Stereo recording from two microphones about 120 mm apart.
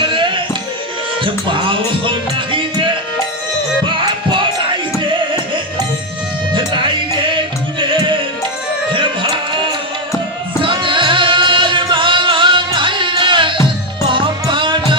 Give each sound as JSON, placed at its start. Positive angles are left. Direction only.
{"t": 0.0, "sound": "music", "side_deg": -45}
{"t": 3.8, "sound": "music", "side_deg": -40}
{"t": 6.5, "sound": "music", "side_deg": -40}